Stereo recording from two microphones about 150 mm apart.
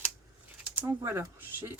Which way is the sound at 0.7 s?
15° right (ahead or behind).